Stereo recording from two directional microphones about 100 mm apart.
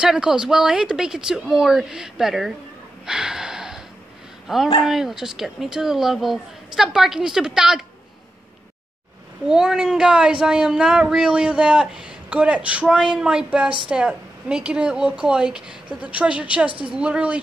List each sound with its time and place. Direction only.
0.0 s speech: 5° right (ahead or behind)
3.1 s a sound: 5° right (ahead or behind)
4.5 s speech: 5° right (ahead or behind)
9.5 s speech: 5° right (ahead or behind)